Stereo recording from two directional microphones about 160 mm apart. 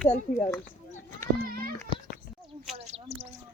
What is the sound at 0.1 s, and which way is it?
Speech, 40° left (ahead or behind).